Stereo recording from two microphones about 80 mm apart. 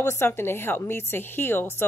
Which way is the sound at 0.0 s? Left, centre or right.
Left.